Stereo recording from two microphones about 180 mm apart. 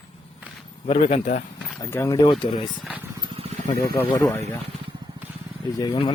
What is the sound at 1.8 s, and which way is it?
Speech, 15° left (ahead or behind).